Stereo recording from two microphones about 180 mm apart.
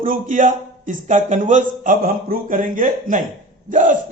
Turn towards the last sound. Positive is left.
turn(degrees=-45)  # may be behind; listen again after turning